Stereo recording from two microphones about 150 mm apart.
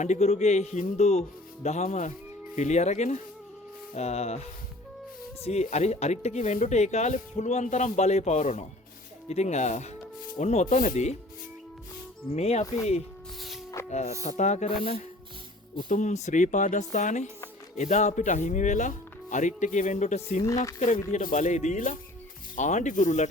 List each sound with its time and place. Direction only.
0.0 s speech: 50° left (ahead or behind)
5.4 s speech: 45° left (ahead or behind)
12.3 s speech: 45° left (ahead or behind)
13.9 s speech: 45° left (ahead or behind)
15.9 s speech: 55° left (ahead or behind)
20.4 s speech: 20° left (ahead or behind)
20.7 s speech: 60° left (ahead or behind)